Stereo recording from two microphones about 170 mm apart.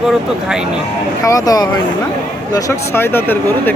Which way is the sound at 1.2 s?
20° left (ahead or behind).